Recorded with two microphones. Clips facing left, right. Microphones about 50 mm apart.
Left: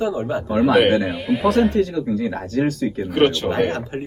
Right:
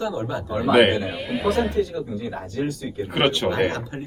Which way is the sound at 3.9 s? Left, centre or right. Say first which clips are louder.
Left 5 dB; left.